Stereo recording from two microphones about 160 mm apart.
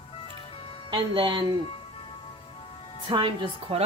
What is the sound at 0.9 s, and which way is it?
Speech, 30° right (ahead or behind).